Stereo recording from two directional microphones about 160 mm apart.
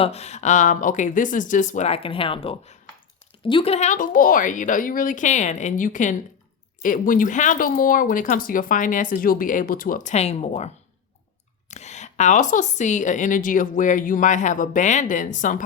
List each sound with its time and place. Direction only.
0.0 s speech: 40° left (ahead or behind)
11.7 s speech: 45° left (ahead or behind)